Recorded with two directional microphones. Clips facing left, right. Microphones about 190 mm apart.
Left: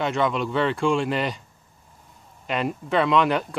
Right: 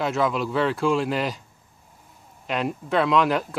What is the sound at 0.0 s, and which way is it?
Speech, centre (ahead or behind).